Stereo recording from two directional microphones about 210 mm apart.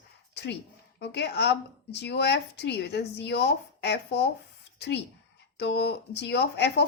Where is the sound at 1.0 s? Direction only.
55° left (ahead or behind).